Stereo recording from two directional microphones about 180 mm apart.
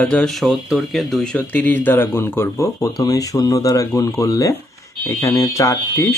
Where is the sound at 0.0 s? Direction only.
5° left (ahead or behind).